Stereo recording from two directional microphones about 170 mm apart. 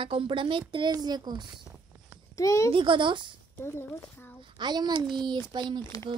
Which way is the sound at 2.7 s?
30° right (ahead or behind).